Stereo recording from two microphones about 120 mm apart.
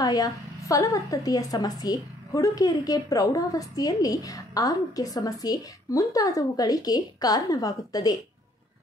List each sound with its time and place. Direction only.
0.0 s a woman's voice: 30° left (ahead or behind)